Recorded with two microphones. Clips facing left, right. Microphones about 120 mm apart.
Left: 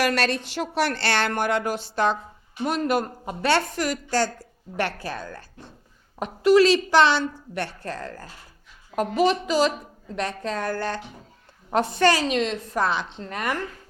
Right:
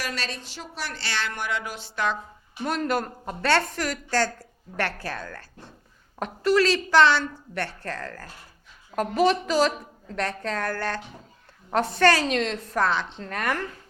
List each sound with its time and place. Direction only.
0.0 s a woman's voice: 65° left (ahead or behind); by 2.1 s 35° left (ahead or behind)
2.6 s a woman's voice: 10° left (ahead or behind)